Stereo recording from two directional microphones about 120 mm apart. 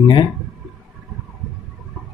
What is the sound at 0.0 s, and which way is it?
Speech, 40° left (ahead or behind).